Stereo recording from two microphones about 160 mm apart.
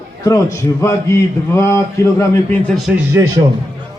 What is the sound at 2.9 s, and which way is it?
Speech, 20° right (ahead or behind).